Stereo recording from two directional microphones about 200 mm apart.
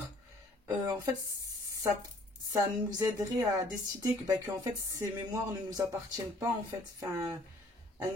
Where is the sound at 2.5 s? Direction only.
15° right (ahead or behind).